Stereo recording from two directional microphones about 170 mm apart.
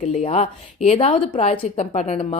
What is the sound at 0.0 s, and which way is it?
A woman's voice, 40° left (ahead or behind).